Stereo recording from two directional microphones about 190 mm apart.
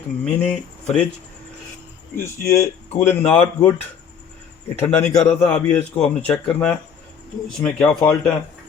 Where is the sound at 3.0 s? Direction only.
10° left (ahead or behind).